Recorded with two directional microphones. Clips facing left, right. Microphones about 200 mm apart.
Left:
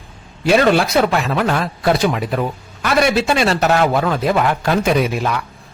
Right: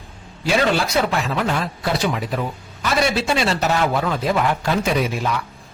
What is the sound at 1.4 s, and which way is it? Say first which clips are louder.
Speech: left 4 dB; 65° left (ahead or behind).